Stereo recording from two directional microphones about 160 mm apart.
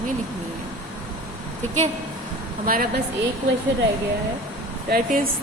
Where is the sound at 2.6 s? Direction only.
60° right (ahead or behind).